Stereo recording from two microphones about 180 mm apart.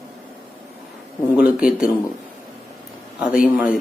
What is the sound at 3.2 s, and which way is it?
Speech, 5° right (ahead or behind).